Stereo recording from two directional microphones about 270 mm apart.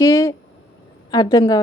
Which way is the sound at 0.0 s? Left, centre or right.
Centre.